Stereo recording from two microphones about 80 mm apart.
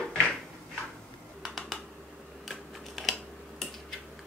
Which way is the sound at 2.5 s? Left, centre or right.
Centre.